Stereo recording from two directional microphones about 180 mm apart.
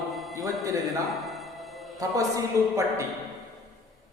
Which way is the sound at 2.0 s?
20° right (ahead or behind).